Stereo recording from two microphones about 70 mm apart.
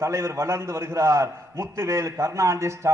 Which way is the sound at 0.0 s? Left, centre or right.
Right.